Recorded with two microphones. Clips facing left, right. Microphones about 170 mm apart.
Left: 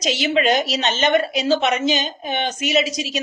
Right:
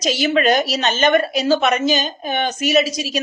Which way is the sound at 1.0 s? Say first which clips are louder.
Right 2 dB; 20° left (ahead or behind).